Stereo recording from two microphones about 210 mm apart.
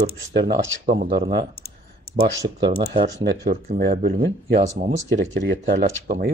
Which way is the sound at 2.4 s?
20° right (ahead or behind).